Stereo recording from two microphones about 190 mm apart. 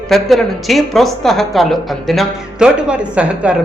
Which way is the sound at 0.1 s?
Centre (ahead or behind).